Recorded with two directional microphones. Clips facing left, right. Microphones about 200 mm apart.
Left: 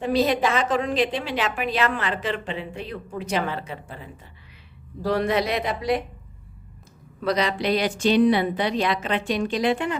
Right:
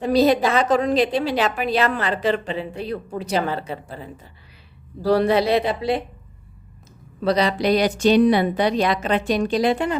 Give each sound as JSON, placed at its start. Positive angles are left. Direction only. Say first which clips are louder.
{"t": 0.0, "sound": "a woman's voice", "louder": "right 4 dB", "side_deg": -40}
{"t": 7.2, "sound": "a woman's voice", "louder": "right 4 dB", "side_deg": -35}